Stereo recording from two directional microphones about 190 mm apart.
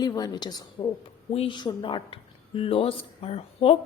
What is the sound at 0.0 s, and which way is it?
A woman's voice, 20° left (ahead or behind).